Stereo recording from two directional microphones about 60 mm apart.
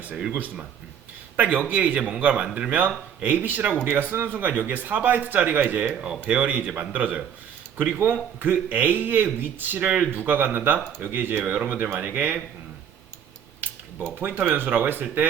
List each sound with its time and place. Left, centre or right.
0.3 s a man's voice: right
3.6 s a man's voice: centre
4.1 s a man's voice: right
5.9 s a man's voice: centre
13.6 s speech: right